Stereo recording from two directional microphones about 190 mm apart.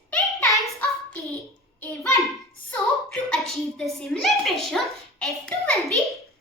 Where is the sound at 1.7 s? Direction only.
10° left (ahead or behind).